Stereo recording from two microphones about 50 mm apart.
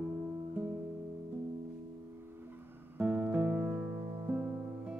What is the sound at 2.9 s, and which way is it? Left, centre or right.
Music, right.